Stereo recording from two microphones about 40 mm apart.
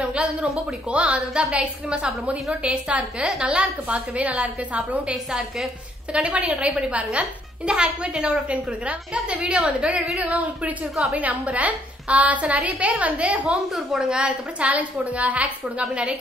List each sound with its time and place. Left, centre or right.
0.0 s a woman's voice: right
6.1 s a woman's voice: right
13.5 s a woman's voice: centre
14.0 s a woman's voice: right
15.8 s a woman's voice: right